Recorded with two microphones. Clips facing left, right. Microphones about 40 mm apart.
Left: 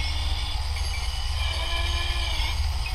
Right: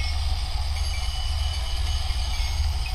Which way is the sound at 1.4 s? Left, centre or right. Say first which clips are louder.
Left 5 dB; left.